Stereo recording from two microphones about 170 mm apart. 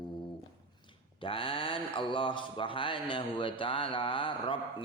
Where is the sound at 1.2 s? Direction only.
30° left (ahead or behind).